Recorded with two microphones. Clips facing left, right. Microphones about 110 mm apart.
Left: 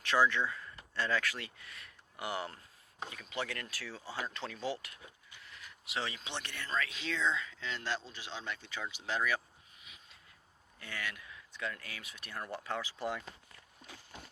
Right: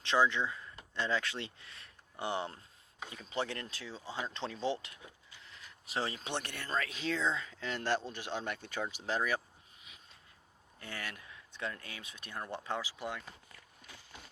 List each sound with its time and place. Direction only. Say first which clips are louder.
0.0 s speech: even; 20° right (ahead or behind)
5.6 s speech: right 2 dB; 35° right (ahead or behind)
10.8 s speech: left 1 dB; 30° right (ahead or behind)
13.0 s speech: left 3 dB; centre (ahead or behind)